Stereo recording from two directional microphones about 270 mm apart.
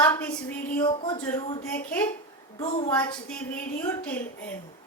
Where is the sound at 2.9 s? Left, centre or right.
Centre.